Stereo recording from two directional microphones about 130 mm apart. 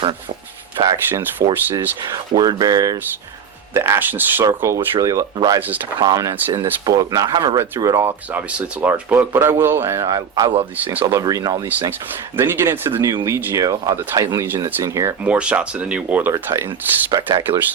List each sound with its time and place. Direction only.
0.9 s a man's voice: 25° right (ahead or behind)
1.7 s speech: 35° right (ahead or behind)
3.8 s a man's voice: 20° right (ahead or behind)
5.5 s speech: 15° right (ahead or behind)
6.0 s a man's voice: 30° right (ahead or behind)
10.8 s speech: 10° right (ahead or behind)
11.0 s a man's voice: 25° right (ahead or behind)
15.2 s speech: 10° right (ahead or behind)
16.3 s a man's voice: 20° right (ahead or behind)
16.6 s speech: 35° right (ahead or behind)